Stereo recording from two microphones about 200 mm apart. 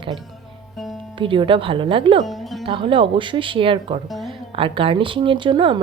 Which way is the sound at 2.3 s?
Centre (ahead or behind).